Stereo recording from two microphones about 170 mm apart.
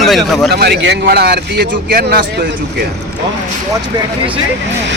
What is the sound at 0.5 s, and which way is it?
Speech, 70° right (ahead or behind).